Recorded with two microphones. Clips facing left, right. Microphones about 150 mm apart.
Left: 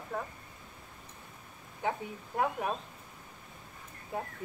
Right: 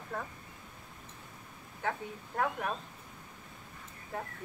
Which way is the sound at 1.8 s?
15° left (ahead or behind).